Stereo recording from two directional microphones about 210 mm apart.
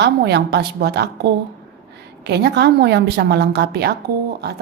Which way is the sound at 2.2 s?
50° right (ahead or behind).